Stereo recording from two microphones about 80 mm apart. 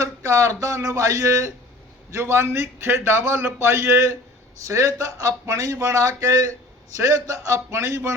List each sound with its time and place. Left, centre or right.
0.0 s a man's voice: right